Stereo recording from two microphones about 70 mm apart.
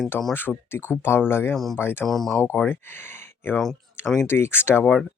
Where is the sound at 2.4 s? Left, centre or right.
Left.